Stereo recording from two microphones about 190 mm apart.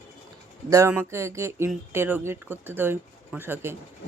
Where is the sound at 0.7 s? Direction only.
15° right (ahead or behind).